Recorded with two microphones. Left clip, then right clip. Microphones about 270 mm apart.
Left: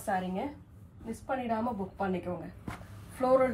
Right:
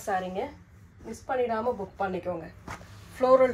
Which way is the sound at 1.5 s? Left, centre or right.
Right.